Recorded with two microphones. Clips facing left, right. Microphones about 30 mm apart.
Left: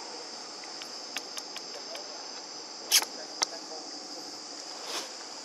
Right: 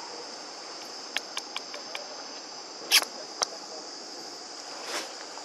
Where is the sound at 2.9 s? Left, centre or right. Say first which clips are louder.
Right 4 dB; right.